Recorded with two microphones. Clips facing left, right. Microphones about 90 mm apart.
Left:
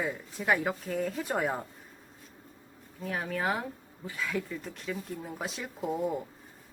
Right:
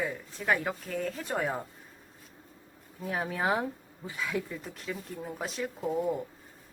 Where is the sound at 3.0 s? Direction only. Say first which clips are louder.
Right 1 dB; 15° right (ahead or behind).